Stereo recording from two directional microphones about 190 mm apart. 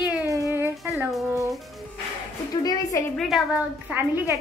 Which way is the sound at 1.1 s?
Centre (ahead or behind).